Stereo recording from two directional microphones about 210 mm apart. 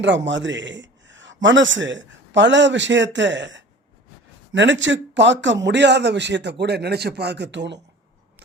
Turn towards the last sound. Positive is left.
turn(degrees=-55)  # may be behind; listen again after turning